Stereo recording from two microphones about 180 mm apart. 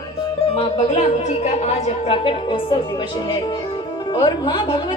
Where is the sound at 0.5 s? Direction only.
40° left (ahead or behind).